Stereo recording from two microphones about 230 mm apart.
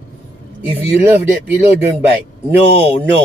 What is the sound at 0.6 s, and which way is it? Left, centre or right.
Speech, centre.